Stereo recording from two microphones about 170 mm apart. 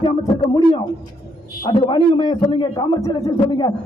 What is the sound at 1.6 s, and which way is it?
A man's voice, 25° left (ahead or behind).